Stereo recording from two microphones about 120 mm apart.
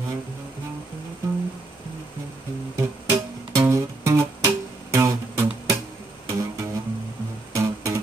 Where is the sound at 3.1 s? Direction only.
25° right (ahead or behind).